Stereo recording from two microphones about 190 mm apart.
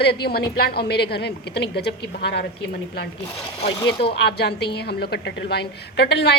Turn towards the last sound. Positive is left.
turn(degrees=60)  # may be behind; listen again after turning